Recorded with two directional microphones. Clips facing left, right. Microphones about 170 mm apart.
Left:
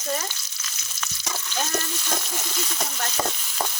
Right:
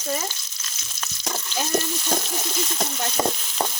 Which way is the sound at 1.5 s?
15° right (ahead or behind).